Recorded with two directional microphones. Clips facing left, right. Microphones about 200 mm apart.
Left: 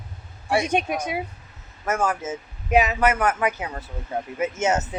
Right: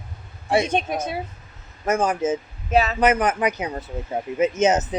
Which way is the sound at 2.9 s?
20° right (ahead or behind).